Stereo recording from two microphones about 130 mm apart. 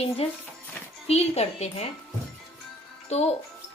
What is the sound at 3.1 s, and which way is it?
Speech, 55° left (ahead or behind).